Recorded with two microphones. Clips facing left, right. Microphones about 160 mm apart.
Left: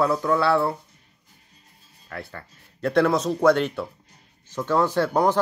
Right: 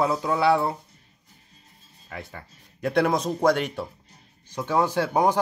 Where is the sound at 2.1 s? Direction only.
15° right (ahead or behind).